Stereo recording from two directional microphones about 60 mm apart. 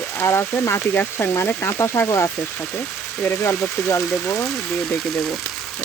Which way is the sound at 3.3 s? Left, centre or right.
Left.